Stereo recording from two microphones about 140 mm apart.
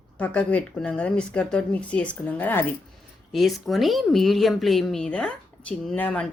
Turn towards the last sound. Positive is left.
turn(degrees=10)  # may be behind; listen again after turning